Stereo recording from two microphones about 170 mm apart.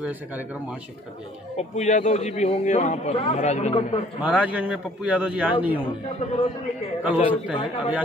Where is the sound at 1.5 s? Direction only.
45° left (ahead or behind).